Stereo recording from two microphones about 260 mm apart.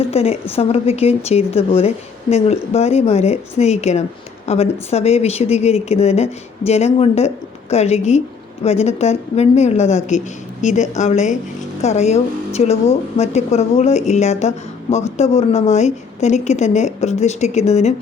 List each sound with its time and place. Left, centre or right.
0.1 s speech: left